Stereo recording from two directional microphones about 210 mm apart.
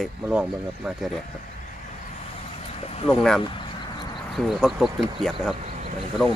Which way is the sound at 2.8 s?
30° left (ahead or behind).